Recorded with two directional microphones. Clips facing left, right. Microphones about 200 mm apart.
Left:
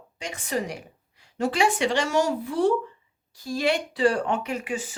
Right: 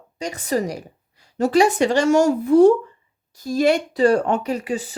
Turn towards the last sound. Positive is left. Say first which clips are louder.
# right 6 dB
turn(degrees=-35)  # may be behind; listen again after turning